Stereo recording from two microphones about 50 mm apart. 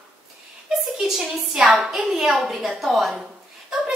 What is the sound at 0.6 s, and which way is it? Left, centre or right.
A woman's voice, centre.